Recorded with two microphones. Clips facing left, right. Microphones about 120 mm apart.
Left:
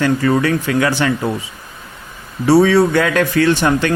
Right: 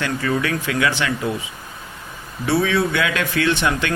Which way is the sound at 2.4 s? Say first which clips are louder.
Left 8 dB; 35° left (ahead or behind).